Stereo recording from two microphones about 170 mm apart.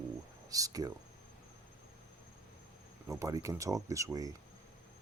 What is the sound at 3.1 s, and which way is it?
Speech, 20° right (ahead or behind).